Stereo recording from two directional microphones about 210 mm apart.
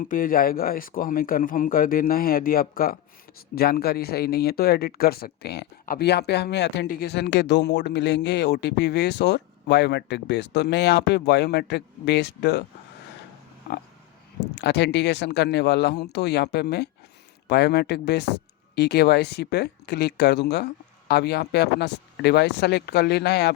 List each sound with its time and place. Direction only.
0.1 s speech: 45° left (ahead or behind)
14.4 s speech: 55° left (ahead or behind)